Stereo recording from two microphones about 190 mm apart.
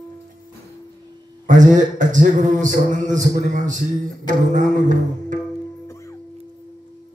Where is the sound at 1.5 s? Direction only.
40° right (ahead or behind).